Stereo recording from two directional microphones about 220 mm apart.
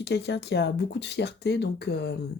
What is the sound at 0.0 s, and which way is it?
Speech, 50° left (ahead or behind).